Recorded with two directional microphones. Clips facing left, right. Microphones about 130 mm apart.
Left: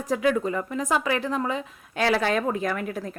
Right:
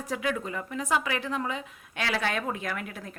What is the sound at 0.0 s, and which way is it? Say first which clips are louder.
A woman's voice: left 7 dB; 40° left (ahead or behind).